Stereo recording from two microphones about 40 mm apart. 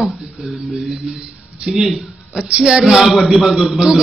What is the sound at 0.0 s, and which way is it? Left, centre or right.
Speech, centre.